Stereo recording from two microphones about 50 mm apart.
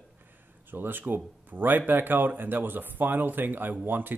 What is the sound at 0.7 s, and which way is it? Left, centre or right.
Speech, right.